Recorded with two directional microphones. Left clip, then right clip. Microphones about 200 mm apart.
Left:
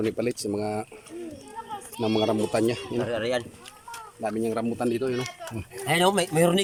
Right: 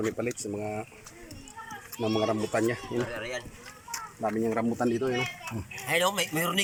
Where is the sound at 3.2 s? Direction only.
60° left (ahead or behind).